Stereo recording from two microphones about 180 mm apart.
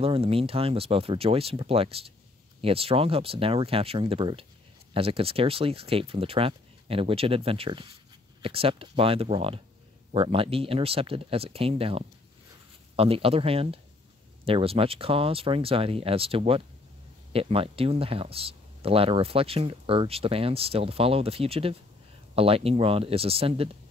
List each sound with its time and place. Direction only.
0.0 s speech: 30° right (ahead or behind)